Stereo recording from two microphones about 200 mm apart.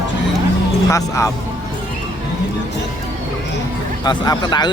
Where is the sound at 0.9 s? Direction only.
15° left (ahead or behind).